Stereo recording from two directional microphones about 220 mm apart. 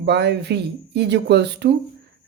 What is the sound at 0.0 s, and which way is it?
Speech, 50° right (ahead or behind).